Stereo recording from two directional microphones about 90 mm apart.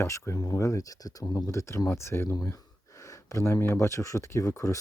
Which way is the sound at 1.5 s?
30° left (ahead or behind).